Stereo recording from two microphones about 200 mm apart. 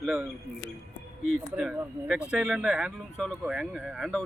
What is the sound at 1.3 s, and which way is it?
Speech, 5° right (ahead or behind).